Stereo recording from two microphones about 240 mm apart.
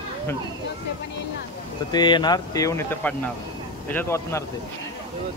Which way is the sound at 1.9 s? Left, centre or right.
Centre.